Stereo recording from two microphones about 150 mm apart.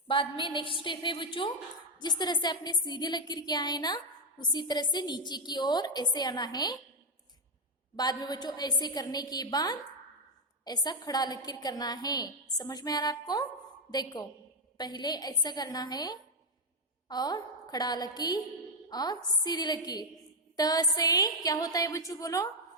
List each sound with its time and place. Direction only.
0.1 s a woman's voice: 35° left (ahead or behind)
7.9 s a woman's voice: 25° left (ahead or behind)